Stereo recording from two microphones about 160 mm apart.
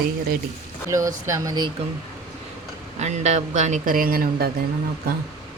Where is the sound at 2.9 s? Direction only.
45° right (ahead or behind); by 4.5 s 65° right (ahead or behind).